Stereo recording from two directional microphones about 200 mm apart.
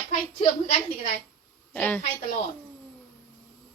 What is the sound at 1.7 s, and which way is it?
Speech, 10° left (ahead or behind).